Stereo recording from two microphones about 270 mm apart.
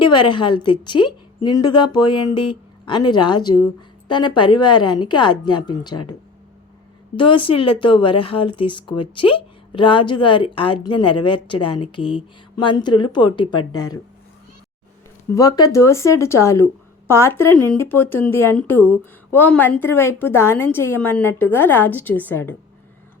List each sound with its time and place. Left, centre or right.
0.0 s speech: centre
7.2 s speech: centre
15.3 s speech: centre